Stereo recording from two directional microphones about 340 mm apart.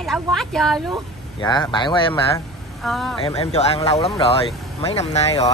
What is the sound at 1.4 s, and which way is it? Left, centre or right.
Speech, centre.